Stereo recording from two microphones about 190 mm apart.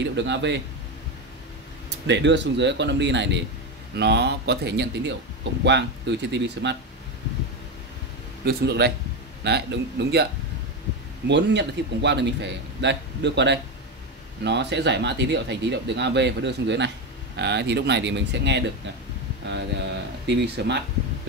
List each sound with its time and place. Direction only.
0.0 s speech: 65° right (ahead or behind)
1.9 s speech: 65° right (ahead or behind)
8.5 s speech: 60° right (ahead or behind)
11.2 s speech: 65° right (ahead or behind)
20.2 s speech: 65° right (ahead or behind)